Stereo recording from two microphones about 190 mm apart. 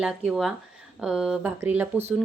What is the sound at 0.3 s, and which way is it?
Speech, centre (ahead or behind).